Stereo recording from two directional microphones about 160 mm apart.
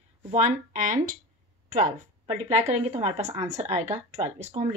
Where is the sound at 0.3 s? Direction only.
45° right (ahead or behind).